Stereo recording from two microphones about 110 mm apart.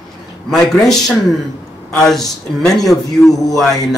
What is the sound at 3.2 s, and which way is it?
Speech, 35° left (ahead or behind).